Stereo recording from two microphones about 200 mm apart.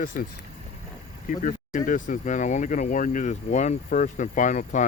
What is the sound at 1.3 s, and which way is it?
Speech, 40° left (ahead or behind).